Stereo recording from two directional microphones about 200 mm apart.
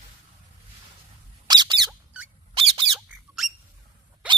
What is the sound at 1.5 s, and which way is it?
Squeak, 20° right (ahead or behind).